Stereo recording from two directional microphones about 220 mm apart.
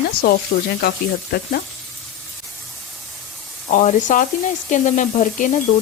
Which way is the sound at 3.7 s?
30° left (ahead or behind).